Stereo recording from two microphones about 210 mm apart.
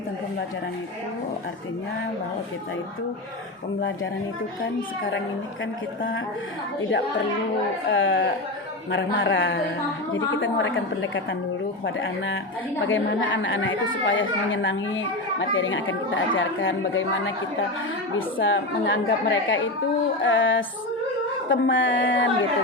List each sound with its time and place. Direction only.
4.6 s speech: 65° left (ahead or behind)
7.9 s speech: 65° left (ahead or behind)
18.4 s speech: 65° left (ahead or behind)